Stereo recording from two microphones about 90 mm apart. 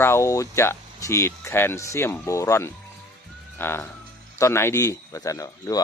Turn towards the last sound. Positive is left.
turn(degrees=40)  # may be behind; listen again after turning